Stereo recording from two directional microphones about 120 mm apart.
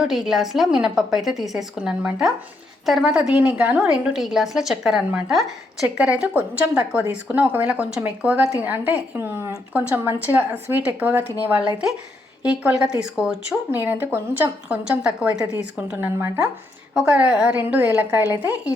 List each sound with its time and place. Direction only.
0.0 s a woman's voice: 5° right (ahead or behind)
16.1 s speech: 20° right (ahead or behind)
16.9 s a woman's voice: 5° right (ahead or behind)